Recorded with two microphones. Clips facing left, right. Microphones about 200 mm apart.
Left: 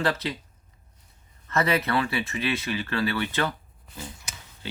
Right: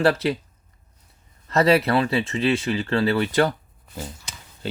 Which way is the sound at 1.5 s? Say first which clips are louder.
Right 6 dB; 35° right (ahead or behind).